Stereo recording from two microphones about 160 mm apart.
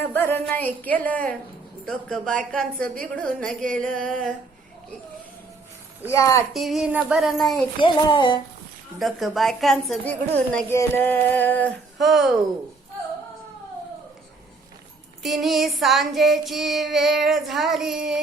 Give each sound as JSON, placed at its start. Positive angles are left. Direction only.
{"t": 0.0, "sound": "a woman's voice", "side_deg": 10}
{"t": 0.5, "sound": "female singing", "side_deg": 10}
{"t": 1.8, "sound": "child singing", "side_deg": 0}
{"t": 6.1, "sound": "speech", "side_deg": 20}
{"t": 6.5, "sound": "child singing", "side_deg": 0}
{"t": 7.8, "sound": "speech", "side_deg": 30}
{"t": 9.0, "sound": "child singing", "side_deg": 0}
{"t": 10.8, "sound": "female singing", "side_deg": 15}
{"t": 11.9, "sound": "child singing", "side_deg": 0}
{"t": 15.2, "sound": "child singing", "side_deg": 0}